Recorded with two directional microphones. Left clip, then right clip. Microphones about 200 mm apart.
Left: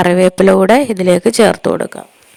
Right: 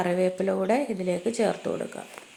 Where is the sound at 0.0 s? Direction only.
50° left (ahead or behind).